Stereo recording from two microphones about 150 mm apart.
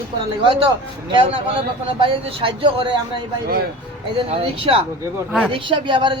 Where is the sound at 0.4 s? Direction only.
35° right (ahead or behind).